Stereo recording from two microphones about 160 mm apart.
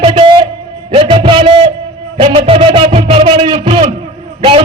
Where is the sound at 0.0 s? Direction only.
35° right (ahead or behind).